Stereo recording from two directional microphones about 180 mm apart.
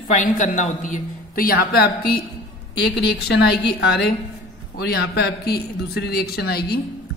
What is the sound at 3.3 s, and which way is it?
A woman's voice, 70° left (ahead or behind).